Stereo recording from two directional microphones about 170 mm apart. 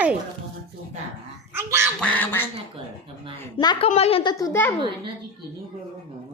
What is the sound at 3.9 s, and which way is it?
Speech, 35° left (ahead or behind).